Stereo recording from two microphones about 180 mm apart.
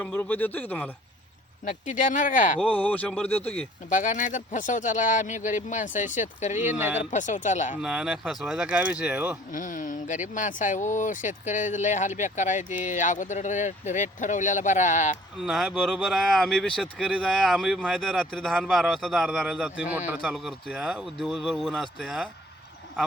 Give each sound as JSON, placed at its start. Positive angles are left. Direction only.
{"t": 0.0, "sound": "speech", "side_deg": 10}
{"t": 1.6, "sound": "speech", "side_deg": 45}
{"t": 2.6, "sound": "speech", "side_deg": 5}
{"t": 3.8, "sound": "speech", "side_deg": 45}
{"t": 6.6, "sound": "speech", "side_deg": -10}
{"t": 7.0, "sound": "speech", "side_deg": 45}
{"t": 7.8, "sound": "speech", "side_deg": -5}
{"t": 9.5, "sound": "speech", "side_deg": 45}
{"t": 15.4, "sound": "speech", "side_deg": -5}